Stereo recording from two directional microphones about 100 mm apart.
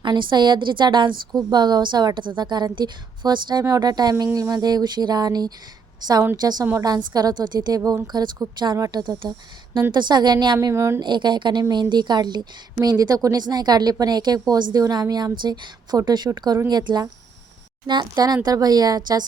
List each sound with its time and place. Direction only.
0.0 s a woman's voice: 50° right (ahead or behind)
4.1 s a woman's voice: 30° right (ahead or behind)
9.9 s a woman's voice: 50° right (ahead or behind)
10.6 s speech: 30° right (ahead or behind)
11.0 s a woman's voice: 50° right (ahead or behind)